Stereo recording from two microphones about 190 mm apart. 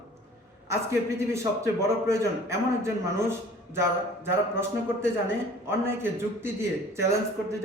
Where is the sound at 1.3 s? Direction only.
15° right (ahead or behind).